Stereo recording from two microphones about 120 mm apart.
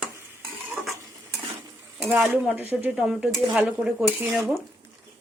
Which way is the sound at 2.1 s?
15° right (ahead or behind).